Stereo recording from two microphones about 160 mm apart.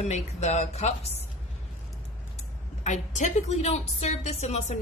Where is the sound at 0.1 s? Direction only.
45° left (ahead or behind).